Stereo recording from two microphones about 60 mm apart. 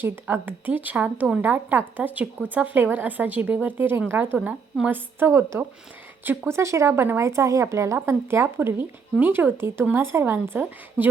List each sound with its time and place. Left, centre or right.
0.0 s speech: right
5.3 s a woman's voice: right
7.9 s a woman's voice: right